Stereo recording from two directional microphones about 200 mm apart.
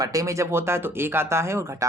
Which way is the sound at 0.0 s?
15° right (ahead or behind).